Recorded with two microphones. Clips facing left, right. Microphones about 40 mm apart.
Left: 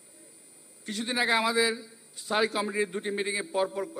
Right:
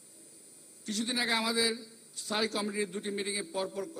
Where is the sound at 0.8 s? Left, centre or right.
Centre.